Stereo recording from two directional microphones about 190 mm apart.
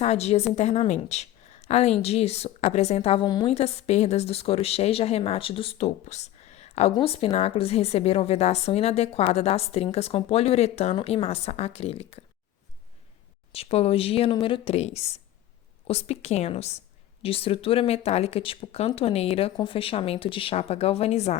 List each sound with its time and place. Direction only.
0.0 s a woman's voice: 35° left (ahead or behind)
13.5 s a woman's voice: 30° left (ahead or behind)